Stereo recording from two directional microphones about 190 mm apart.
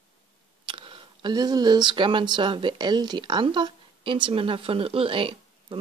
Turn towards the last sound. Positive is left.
turn(degrees=-25)  # may be behind; listen again after turning